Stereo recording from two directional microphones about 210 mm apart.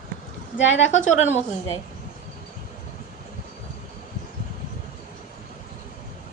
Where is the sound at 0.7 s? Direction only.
35° left (ahead or behind).